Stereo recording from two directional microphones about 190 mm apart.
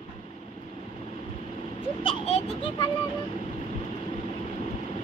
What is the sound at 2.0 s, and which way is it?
Speech, 30° left (ahead or behind).